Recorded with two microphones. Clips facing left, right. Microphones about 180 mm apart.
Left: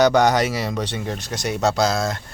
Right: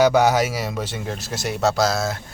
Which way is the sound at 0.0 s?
5° right (ahead or behind).